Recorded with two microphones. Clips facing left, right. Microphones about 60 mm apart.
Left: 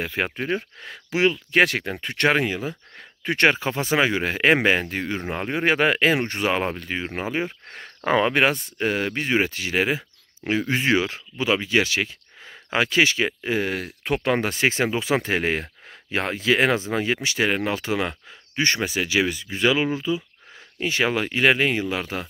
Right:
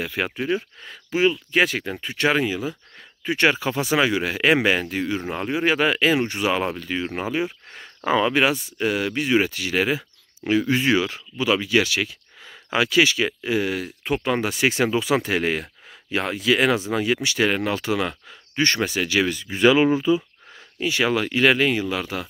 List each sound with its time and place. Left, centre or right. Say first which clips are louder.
0.0 s speech: even; left
0.4 s speech: right 2 dB; left
1.1 s speech: even; left
3.5 s speech: right 1 dB; left
7.4 s speech: right 1 dB; left; by 19.4 s centre
19.5 s speech: right 6 dB; centre
20.8 s speech: right 1 dB; left